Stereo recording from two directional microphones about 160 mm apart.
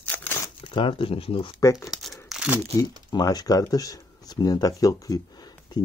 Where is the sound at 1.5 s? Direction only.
20° left (ahead or behind).